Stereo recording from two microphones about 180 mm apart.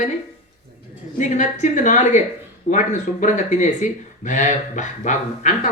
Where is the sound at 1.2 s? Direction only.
45° left (ahead or behind).